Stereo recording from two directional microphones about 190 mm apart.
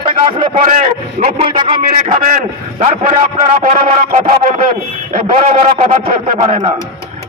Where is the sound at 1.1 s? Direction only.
40° right (ahead or behind).